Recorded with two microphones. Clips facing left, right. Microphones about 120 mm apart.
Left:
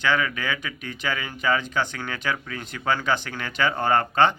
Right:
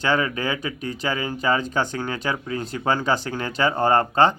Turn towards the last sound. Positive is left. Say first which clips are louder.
# right 2 dB
turn(degrees=-35)  # may be behind; listen again after turning